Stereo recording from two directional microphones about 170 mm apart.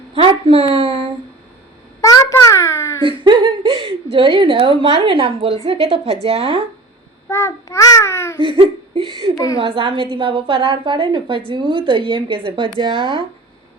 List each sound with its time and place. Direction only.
0.1 s speech: 35° right (ahead or behind)
2.0 s a sound: 20° left (ahead or behind)
3.0 s a woman's voice: 30° right (ahead or behind)
7.3 s a child's voice: 15° left (ahead or behind)
8.4 s a woman's voice: 30° right (ahead or behind)